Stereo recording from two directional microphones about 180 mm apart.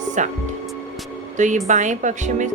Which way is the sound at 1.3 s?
45° right (ahead or behind).